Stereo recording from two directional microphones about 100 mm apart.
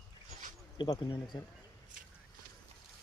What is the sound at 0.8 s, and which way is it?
Speech, 50° left (ahead or behind).